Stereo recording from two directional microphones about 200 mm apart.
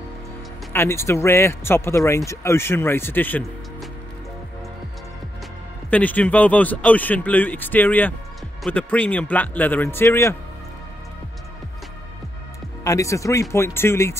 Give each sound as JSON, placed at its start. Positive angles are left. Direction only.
{"t": 0.7, "sound": "a man's voice", "side_deg": 15}
{"t": 5.9, "sound": "a man's voice", "side_deg": 5}
{"t": 12.8, "sound": "a man's voice", "side_deg": 15}